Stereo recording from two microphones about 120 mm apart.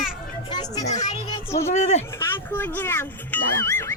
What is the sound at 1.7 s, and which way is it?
Speech, 65° left (ahead or behind).